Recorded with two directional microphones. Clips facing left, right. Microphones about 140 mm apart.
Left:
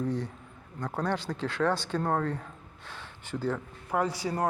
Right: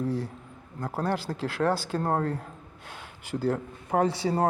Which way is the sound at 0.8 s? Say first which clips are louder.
Right 2 dB; 5° right (ahead or behind).